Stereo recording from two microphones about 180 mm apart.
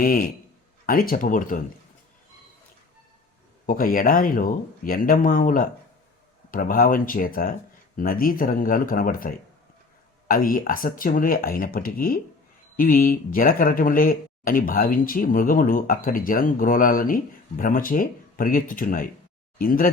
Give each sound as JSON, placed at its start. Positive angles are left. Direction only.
{"t": 0.0, "sound": "speech", "side_deg": 50}
{"t": 3.7, "sound": "speech", "side_deg": 50}